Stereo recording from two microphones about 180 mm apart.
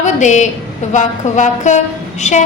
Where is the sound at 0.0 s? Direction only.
40° left (ahead or behind).